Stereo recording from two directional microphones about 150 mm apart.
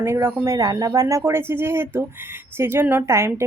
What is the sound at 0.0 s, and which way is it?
A woman's voice, 15° right (ahead or behind).